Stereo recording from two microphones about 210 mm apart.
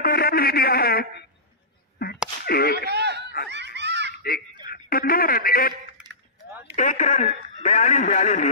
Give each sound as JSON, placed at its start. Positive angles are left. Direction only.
{"t": 0.0, "sound": "speech", "side_deg": 45}
{"t": 2.4, "sound": "speech", "side_deg": 45}
{"t": 2.9, "sound": "snicker", "side_deg": -55}
{"t": 3.4, "sound": "laughter", "side_deg": -55}
{"t": 4.6, "sound": "a man's voice", "side_deg": 45}
{"t": 6.8, "sound": "speech", "side_deg": 35}